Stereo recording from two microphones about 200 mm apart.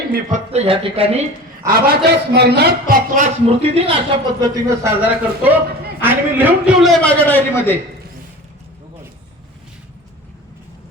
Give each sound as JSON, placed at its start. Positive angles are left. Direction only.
{"t": 0.1, "sound": "speech", "side_deg": -40}
{"t": 1.6, "sound": "a man's voice", "side_deg": -50}
{"t": 2.9, "sound": "speech", "side_deg": -40}
{"t": 3.8, "sound": "a man's voice", "side_deg": -25}